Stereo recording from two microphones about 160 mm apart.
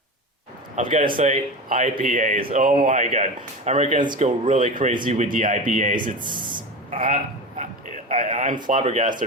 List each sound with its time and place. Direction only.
0.8 s speech: 50° right (ahead or behind)
6.3 s speech: 30° right (ahead or behind)
6.9 s speech: 55° right (ahead or behind)
8.1 s a sound: 50° right (ahead or behind)
8.6 s speech: 50° right (ahead or behind)